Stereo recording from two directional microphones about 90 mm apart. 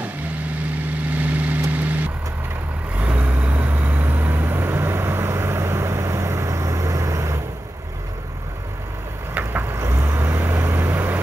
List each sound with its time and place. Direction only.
1.1 s vehicle: 20° right (ahead or behind); by 7.3 s 35° right (ahead or behind)
9.3 s vehicle: 20° right (ahead or behind)